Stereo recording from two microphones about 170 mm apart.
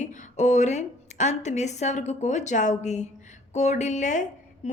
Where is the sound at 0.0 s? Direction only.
45° left (ahead or behind).